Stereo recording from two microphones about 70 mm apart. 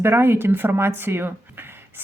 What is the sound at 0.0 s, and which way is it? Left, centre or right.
Speech, right.